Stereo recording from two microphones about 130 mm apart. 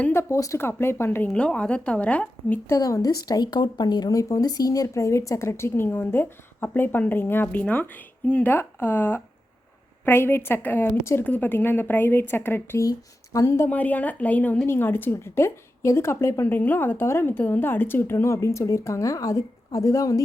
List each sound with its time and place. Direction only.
0.0 s a woman's voice: 20° left (ahead or behind)
2.7 s a woman's voice: 25° left (ahead or behind)